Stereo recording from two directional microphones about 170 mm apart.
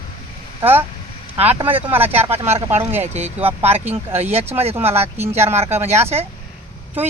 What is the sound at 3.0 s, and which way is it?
Speech, 40° right (ahead or behind).